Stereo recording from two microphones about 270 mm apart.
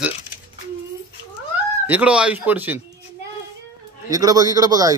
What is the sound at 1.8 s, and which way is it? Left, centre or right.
Speech, centre.